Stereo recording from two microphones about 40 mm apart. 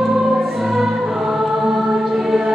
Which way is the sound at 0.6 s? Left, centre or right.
Centre.